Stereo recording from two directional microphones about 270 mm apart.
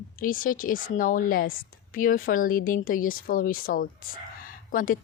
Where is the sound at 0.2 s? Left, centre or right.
Left.